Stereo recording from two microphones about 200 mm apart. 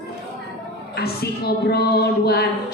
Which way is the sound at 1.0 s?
55° left (ahead or behind).